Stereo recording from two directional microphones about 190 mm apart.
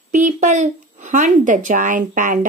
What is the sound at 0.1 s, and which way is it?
Speech, 40° right (ahead or behind).